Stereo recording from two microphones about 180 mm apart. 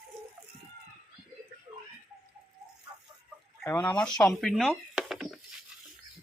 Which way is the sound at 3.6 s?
10° left (ahead or behind).